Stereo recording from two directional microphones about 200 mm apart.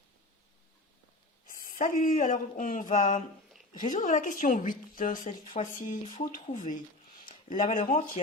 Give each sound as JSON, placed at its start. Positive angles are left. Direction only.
{"t": 1.5, "sound": "a woman's voice", "side_deg": 45}